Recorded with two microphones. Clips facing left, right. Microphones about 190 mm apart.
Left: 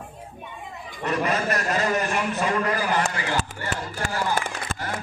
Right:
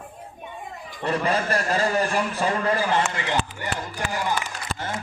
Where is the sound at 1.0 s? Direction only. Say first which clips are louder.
Right 1 dB; 30° right (ahead or behind).